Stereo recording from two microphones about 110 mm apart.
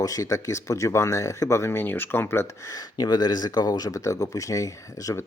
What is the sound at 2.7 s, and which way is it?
Speech, 40° left (ahead or behind).